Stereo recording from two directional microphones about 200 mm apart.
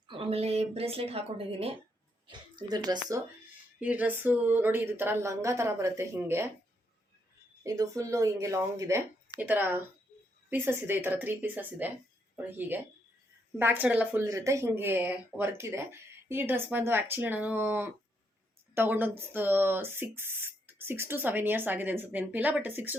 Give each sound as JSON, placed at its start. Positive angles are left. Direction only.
{"t": 0.1, "sound": "speech", "side_deg": -30}
{"t": 3.8, "sound": "speech", "side_deg": -5}
{"t": 7.6, "sound": "speech", "side_deg": -15}